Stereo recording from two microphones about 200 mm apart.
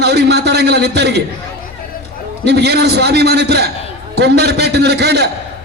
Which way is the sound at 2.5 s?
55° right (ahead or behind).